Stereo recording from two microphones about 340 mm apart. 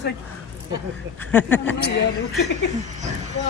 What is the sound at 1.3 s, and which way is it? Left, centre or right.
Speech, centre.